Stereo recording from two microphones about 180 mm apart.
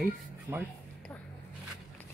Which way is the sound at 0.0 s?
5° right (ahead or behind).